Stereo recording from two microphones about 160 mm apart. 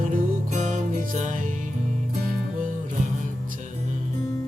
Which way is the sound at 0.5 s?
50° right (ahead or behind).